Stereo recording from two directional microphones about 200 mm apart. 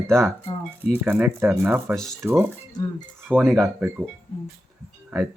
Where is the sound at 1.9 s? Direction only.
5° left (ahead or behind).